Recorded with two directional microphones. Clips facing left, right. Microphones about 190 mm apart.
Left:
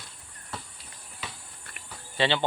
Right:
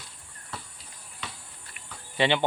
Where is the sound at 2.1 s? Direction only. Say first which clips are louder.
Right 2 dB; 15° right (ahead or behind).